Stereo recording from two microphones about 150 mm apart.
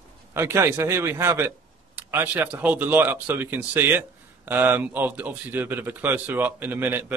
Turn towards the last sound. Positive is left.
turn(degrees=-15)  # may be behind; listen again after turning